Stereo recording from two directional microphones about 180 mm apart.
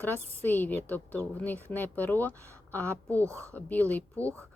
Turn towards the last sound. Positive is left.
turn(degrees=10)  # may be behind; listen again after turning